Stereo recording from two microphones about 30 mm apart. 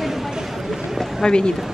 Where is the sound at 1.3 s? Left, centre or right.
Left.